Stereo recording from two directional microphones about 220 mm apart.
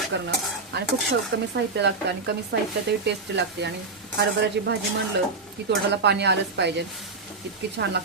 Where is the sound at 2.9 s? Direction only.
50° right (ahead or behind).